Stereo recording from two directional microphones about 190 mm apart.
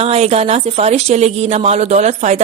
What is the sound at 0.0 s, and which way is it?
A woman's voice, 30° right (ahead or behind).